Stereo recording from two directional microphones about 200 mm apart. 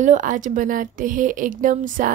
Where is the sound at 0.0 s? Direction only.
40° right (ahead or behind).